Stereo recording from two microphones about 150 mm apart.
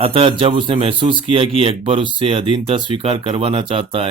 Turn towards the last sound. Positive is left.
turn(degrees=-40)  # may be behind; listen again after turning